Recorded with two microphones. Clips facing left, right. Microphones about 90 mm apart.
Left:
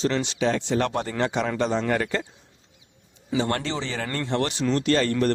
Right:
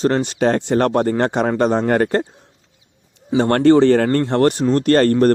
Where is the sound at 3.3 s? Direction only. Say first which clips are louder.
Right 14 dB; 55° right (ahead or behind).